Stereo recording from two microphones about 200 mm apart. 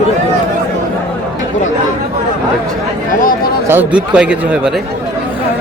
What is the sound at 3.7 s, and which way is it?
Speech, 10° right (ahead or behind).